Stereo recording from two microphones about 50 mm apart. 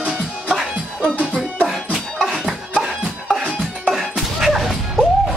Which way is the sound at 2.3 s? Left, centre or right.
Centre.